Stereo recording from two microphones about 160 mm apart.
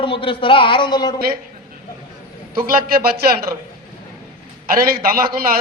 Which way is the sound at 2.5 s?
65° right (ahead or behind).